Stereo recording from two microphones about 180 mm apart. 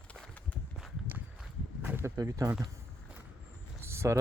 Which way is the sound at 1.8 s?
10° right (ahead or behind).